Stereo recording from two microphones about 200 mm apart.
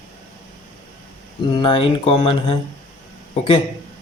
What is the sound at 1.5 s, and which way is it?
Speech, 25° left (ahead or behind).